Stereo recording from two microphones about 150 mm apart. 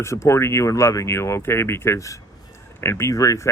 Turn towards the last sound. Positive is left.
turn(degrees=25)  # may be behind; listen again after turning